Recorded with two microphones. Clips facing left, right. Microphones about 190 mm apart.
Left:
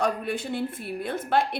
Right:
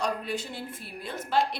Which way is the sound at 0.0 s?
55° left (ahead or behind).